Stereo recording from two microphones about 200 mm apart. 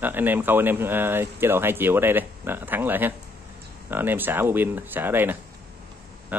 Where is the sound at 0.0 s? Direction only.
10° right (ahead or behind).